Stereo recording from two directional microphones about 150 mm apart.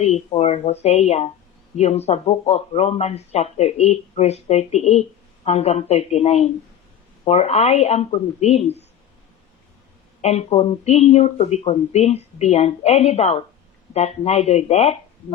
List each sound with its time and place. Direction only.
0.0 s speech: 45° left (ahead or behind)
10.2 s speech: 45° left (ahead or behind)